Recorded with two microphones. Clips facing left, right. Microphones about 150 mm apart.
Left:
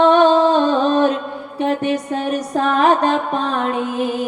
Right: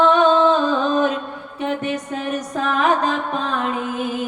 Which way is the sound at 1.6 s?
30° left (ahead or behind).